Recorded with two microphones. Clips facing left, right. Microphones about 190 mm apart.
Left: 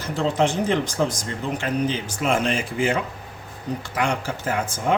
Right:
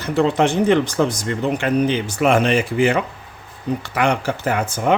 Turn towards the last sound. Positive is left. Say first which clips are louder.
# right 4 dB
turn(degrees=-70)  # may be behind; listen again after turning